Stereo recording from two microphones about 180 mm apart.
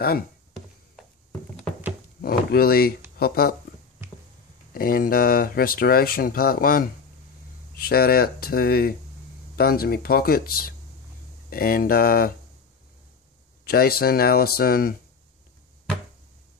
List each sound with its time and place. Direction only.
2.2 s speech: 55° left (ahead or behind)
4.7 s speech: 55° left (ahead or behind)
13.7 s speech: 60° left (ahead or behind)